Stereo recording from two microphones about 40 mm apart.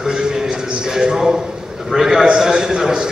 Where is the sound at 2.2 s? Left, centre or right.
Centre.